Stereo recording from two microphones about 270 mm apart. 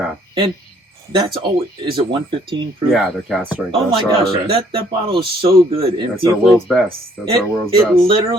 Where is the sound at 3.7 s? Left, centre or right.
Centre.